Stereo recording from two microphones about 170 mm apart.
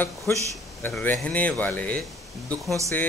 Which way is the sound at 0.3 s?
10° left (ahead or behind).